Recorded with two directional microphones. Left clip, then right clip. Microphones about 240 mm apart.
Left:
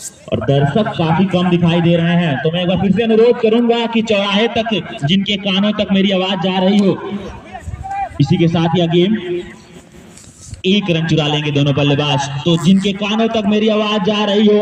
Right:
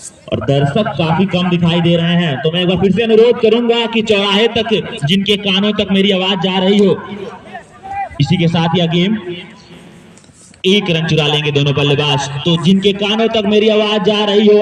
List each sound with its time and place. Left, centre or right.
0.3 s speech: right
8.2 s speech: right
10.6 s speech: right